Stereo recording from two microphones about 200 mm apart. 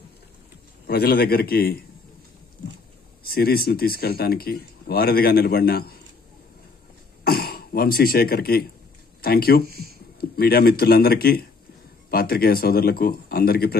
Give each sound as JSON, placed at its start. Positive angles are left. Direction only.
{"t": 0.8, "sound": "speech", "side_deg": 50}
{"t": 3.3, "sound": "speech", "side_deg": 50}
{"t": 7.2, "sound": "speech", "side_deg": 50}
{"t": 9.7, "sound": "speech", "side_deg": -50}
{"t": 10.3, "sound": "speech", "side_deg": 50}